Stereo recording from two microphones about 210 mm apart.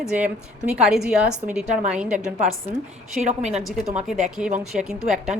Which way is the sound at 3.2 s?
30° right (ahead or behind).